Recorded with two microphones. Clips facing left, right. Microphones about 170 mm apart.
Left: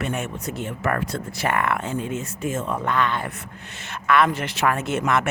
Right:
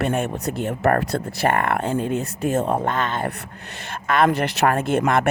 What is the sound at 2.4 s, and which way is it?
Speech, 65° right (ahead or behind).